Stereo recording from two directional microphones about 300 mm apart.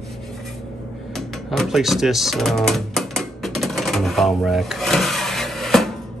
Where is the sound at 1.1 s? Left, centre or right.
Centre.